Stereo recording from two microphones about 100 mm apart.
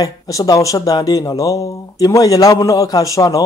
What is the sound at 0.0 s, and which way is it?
Speech, 35° left (ahead or behind).